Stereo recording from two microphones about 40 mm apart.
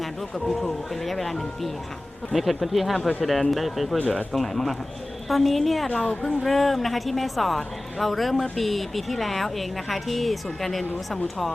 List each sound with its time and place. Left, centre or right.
0.0 s a woman's voice: centre
5.9 s speech: left
6.4 s a woman's voice: centre